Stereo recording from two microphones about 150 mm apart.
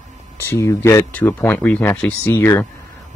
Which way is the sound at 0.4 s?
15° left (ahead or behind).